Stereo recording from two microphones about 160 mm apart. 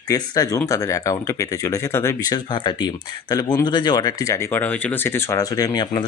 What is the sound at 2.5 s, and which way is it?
Speech, 30° left (ahead or behind).